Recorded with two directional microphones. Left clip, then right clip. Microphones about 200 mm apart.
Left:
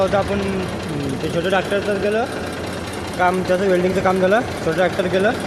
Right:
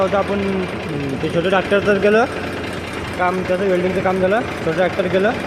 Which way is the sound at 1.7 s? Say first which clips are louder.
Right 5 dB; 15° right (ahead or behind).